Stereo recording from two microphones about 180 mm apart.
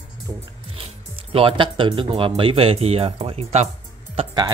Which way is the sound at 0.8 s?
30° right (ahead or behind).